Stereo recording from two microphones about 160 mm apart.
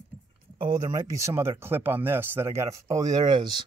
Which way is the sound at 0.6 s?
25° right (ahead or behind).